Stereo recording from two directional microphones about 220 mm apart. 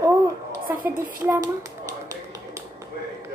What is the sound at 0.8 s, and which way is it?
Speech, 10° right (ahead or behind).